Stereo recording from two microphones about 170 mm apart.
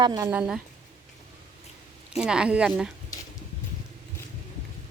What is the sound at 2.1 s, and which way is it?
Speech, 5° right (ahead or behind).